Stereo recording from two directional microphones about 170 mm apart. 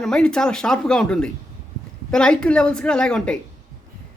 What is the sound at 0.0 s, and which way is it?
Speech, 5° left (ahead or behind).